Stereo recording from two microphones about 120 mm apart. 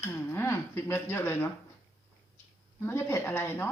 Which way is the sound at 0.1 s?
20° left (ahead or behind).